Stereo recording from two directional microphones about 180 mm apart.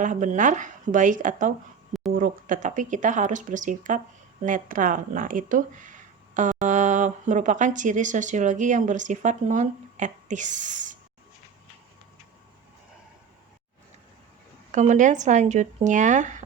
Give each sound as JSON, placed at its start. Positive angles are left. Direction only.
{"t": 0.0, "sound": "speech", "side_deg": -45}
{"t": 14.7, "sound": "speech", "side_deg": -40}